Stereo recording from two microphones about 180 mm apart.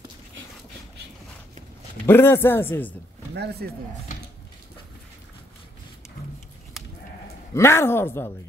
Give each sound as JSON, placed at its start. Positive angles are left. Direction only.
{"t": 2.0, "sound": "speech", "side_deg": 15}
{"t": 3.6, "sound": "speech", "side_deg": -60}
{"t": 7.5, "sound": "speech", "side_deg": 15}